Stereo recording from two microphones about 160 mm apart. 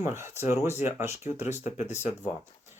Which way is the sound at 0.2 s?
15° right (ahead or behind).